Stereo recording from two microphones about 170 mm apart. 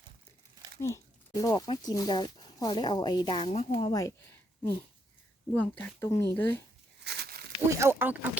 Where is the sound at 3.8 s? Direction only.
20° left (ahead or behind).